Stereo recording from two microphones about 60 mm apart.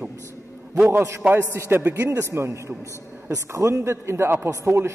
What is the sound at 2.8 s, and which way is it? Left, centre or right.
Speech, left.